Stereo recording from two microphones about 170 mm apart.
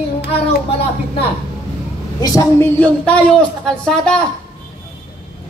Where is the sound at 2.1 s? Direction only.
20° left (ahead or behind).